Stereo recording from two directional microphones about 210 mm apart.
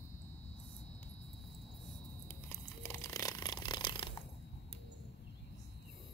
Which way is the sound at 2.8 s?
15° left (ahead or behind).